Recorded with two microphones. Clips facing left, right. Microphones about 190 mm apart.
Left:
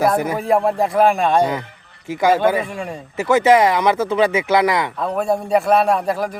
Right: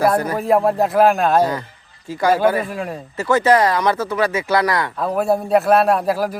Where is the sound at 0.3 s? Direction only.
Centre (ahead or behind).